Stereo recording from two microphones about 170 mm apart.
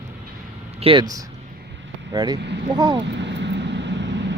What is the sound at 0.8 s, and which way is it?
Speech, 30° right (ahead or behind).